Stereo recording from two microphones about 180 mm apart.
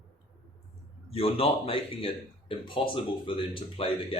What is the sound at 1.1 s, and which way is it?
Speech, 30° left (ahead or behind).